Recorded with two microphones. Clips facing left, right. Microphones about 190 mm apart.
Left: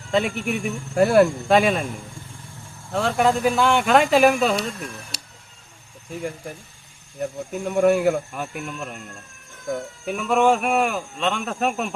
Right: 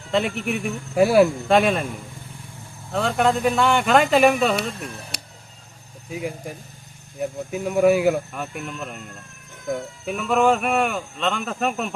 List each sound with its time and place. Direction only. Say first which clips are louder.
0.1 s speech: even; centre (ahead or behind)
2.9 s speech: even; centre (ahead or behind)
5.1 s a sound: right 3 dB; 60° right (ahead or behind)
6.1 s speech: right 1 dB; 5° right (ahead or behind)
10.1 s speech: even; centre (ahead or behind)